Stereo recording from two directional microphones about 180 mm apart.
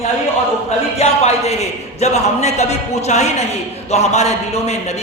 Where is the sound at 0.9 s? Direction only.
35° left (ahead or behind).